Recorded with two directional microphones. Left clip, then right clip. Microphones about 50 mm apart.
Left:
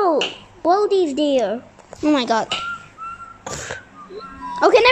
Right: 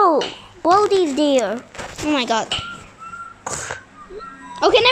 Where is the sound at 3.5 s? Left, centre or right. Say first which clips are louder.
Right 1 dB; right.